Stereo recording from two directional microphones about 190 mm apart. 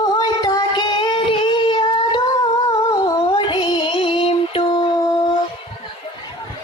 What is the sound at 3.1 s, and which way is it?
Music, 25° left (ahead or behind).